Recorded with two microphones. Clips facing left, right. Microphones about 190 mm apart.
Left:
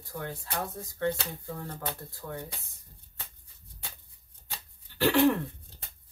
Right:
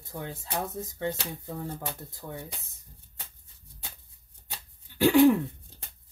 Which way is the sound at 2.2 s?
15° right (ahead or behind).